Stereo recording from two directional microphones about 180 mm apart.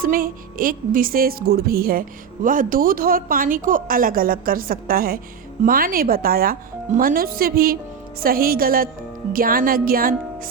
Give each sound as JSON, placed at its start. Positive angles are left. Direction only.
{"t": 0.0, "sound": "music", "side_deg": -50}
{"t": 5.6, "sound": "speech", "side_deg": -50}
{"t": 9.3, "sound": "music", "side_deg": -55}